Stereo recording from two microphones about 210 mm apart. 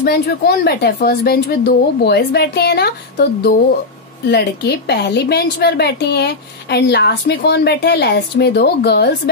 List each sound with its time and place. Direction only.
0.0 s a woman's voice: 50° left (ahead or behind)
4.3 s a woman's voice: 50° left (ahead or behind)